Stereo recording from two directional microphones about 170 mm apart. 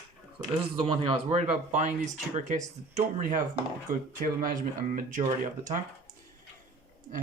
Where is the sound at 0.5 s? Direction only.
30° right (ahead or behind).